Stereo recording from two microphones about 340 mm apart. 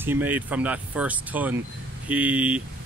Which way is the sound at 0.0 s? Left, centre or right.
Centre.